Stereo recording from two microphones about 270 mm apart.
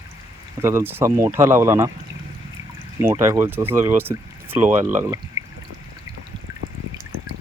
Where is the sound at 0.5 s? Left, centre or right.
Centre.